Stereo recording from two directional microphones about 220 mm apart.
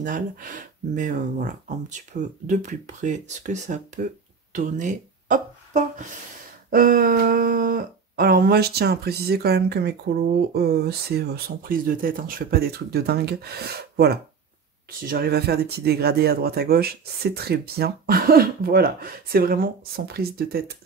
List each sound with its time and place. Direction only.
0.0 s speech: 35° right (ahead or behind)